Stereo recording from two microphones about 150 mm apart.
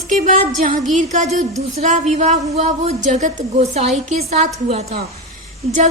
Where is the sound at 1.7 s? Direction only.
50° right (ahead or behind).